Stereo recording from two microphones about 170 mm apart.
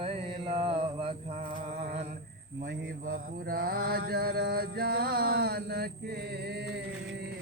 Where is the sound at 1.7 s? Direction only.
40° right (ahead or behind).